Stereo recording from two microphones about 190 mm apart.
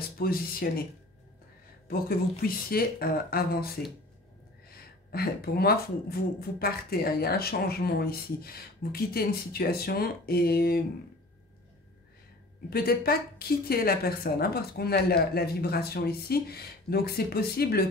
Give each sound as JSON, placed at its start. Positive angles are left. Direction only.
{"t": 0.2, "sound": "speech", "side_deg": 50}
{"t": 1.9, "sound": "speech", "side_deg": 50}
{"t": 12.6, "sound": "a woman's voice", "side_deg": 55}